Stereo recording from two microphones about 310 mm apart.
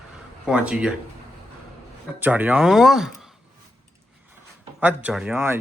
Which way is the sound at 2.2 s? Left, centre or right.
Centre.